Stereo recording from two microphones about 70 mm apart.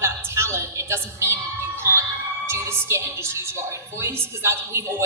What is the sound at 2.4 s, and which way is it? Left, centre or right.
A woman's voice, right.